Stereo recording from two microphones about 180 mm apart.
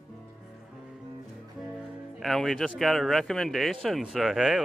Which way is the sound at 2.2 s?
Centre (ahead or behind).